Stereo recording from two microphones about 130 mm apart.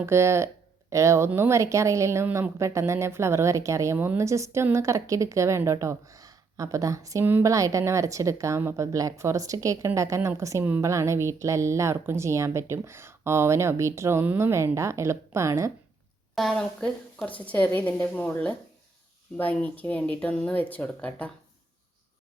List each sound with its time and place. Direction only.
0.0 s a woman's voice: 20° right (ahead or behind)
16.3 s speech: centre (ahead or behind)